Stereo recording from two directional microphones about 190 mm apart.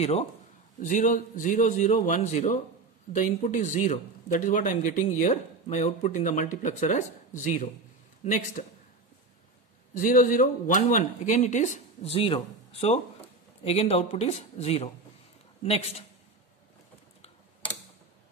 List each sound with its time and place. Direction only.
0.0 s a man's voice: 35° left (ahead or behind)
9.9 s speech: 45° left (ahead or behind)
13.7 s speech: 30° left (ahead or behind)